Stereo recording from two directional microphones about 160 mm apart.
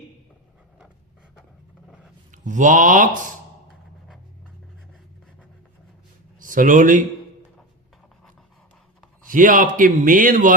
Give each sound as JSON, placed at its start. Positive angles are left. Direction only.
{"t": 2.3, "sound": "a man's voice", "side_deg": -50}
{"t": 6.4, "sound": "speech", "side_deg": -55}
{"t": 9.3, "sound": "a man's voice", "side_deg": -55}